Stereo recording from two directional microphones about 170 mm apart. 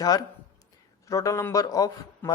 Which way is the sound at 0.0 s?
20° left (ahead or behind).